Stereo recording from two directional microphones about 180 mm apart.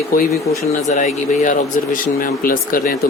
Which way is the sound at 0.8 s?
40° left (ahead or behind).